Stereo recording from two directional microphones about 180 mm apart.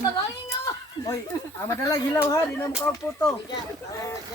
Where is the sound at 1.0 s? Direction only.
15° left (ahead or behind).